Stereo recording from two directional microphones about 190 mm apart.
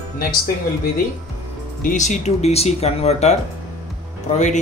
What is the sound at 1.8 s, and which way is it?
Speech, 40° left (ahead or behind).